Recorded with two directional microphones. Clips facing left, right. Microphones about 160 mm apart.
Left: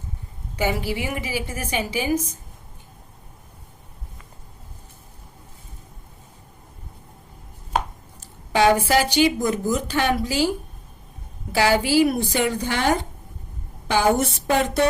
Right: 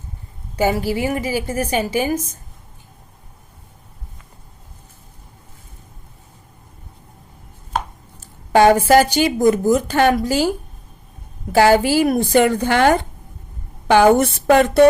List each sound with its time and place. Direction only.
0.5 s a woman's voice: 40° right (ahead or behind)
8.5 s a woman's voice: 50° right (ahead or behind)
11.5 s a woman's voice: 50° right (ahead or behind)